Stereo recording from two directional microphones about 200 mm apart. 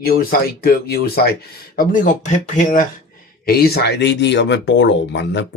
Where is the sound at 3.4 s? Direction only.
50° left (ahead or behind).